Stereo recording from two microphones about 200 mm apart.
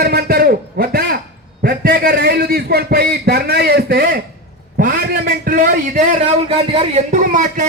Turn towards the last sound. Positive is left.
turn(degrees=-40)  # may be behind; listen again after turning